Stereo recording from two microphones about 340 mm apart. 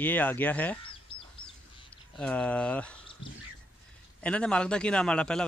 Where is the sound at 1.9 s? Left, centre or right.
Centre.